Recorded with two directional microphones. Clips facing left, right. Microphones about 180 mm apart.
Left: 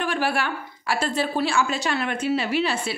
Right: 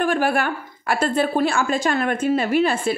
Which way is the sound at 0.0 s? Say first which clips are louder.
Right 5 dB; 50° right (ahead or behind).